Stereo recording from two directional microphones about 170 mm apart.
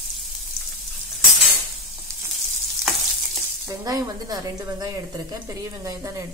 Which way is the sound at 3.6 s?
20° right (ahead or behind).